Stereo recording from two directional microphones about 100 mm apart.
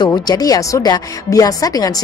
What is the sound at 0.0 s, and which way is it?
Speech, 40° left (ahead or behind).